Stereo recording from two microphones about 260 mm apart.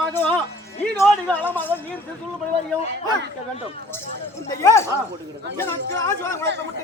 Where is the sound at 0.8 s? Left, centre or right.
Centre.